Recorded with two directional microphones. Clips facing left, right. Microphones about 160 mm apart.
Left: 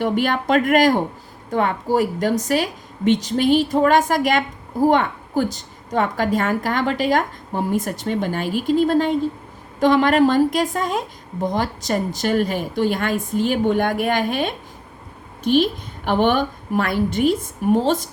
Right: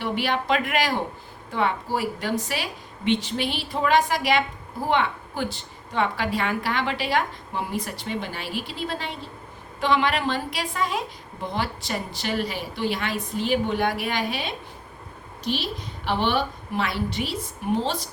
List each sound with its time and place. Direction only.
0.0 s a woman's voice: 45° left (ahead or behind)